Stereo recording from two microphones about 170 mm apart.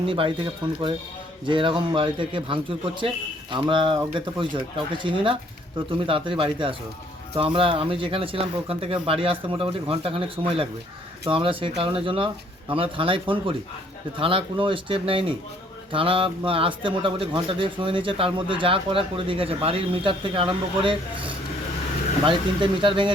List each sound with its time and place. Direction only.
0.0 s a man's voice: 30° right (ahead or behind)
22.3 s speech: 30° right (ahead or behind)